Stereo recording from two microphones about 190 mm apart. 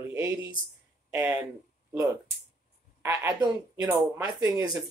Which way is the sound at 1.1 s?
15° right (ahead or behind).